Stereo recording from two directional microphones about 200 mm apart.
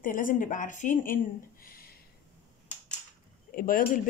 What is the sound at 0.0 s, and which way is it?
A woman's voice, 40° left (ahead or behind).